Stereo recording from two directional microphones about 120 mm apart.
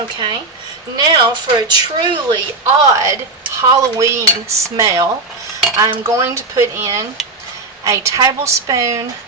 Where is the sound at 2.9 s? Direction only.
25° right (ahead or behind).